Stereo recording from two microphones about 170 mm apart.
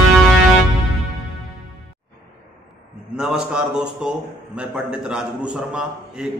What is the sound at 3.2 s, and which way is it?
A man's voice, 5° right (ahead or behind).